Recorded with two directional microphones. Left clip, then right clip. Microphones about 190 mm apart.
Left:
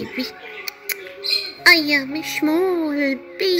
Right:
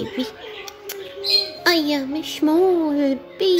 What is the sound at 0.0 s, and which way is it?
Music, 5° left (ahead or behind).